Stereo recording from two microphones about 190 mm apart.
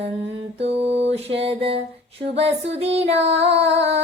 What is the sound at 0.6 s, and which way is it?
Music, 30° right (ahead or behind).